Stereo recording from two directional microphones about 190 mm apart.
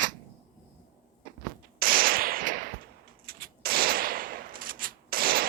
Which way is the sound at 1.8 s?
50° right (ahead or behind).